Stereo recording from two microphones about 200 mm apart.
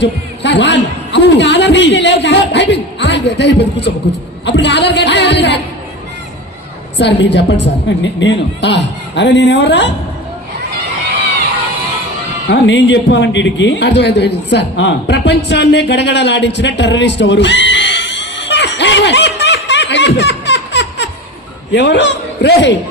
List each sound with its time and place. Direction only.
0.0 s a man's voice: 60° left (ahead or behind)
4.4 s a sound: 60° left (ahead or behind)
7.0 s a man's voice: 60° left (ahead or behind)
12.5 s a man's voice: 60° left (ahead or behind)